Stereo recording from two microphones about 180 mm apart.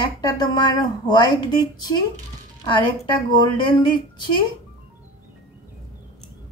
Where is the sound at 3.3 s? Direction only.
25° left (ahead or behind).